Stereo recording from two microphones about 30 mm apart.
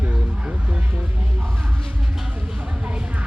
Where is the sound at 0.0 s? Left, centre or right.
Right.